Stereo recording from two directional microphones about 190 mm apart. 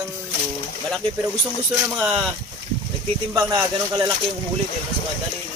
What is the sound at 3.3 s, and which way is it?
Speech, 20° right (ahead or behind).